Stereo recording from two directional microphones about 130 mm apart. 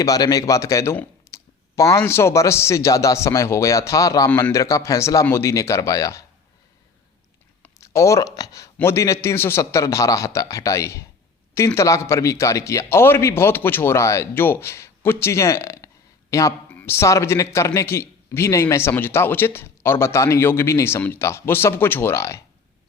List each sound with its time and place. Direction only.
0.0 s speech: 30° left (ahead or behind)
4.3 s a man's voice: 10° left (ahead or behind)
4.5 s speech: 25° left (ahead or behind)
7.6 s speech: 20° left (ahead or behind)